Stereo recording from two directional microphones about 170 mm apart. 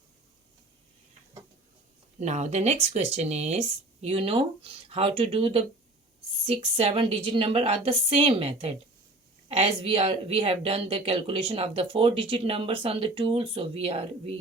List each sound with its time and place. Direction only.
2.1 s speech: 40° right (ahead or behind)